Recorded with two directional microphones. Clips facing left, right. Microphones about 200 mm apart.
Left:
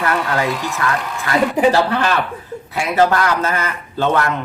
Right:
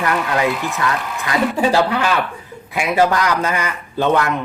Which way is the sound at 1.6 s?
20° left (ahead or behind).